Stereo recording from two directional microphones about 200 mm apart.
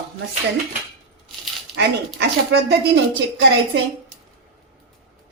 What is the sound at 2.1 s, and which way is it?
Speech, 60° right (ahead or behind).